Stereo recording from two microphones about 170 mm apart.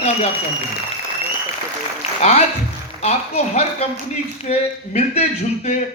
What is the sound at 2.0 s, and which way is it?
A man's voice, 40° left (ahead or behind).